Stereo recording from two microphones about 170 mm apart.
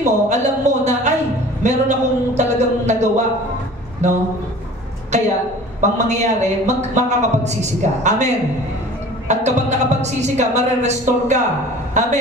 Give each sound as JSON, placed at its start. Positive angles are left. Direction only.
{"t": 0.0, "sound": "a man's voice", "side_deg": -45}
{"t": 9.3, "sound": "a man's voice", "side_deg": -45}